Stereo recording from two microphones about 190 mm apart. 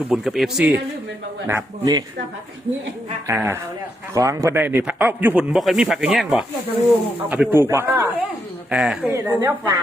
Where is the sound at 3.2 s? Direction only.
10° right (ahead or behind).